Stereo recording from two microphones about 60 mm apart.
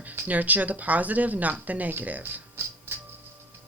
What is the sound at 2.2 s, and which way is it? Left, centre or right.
Music, right.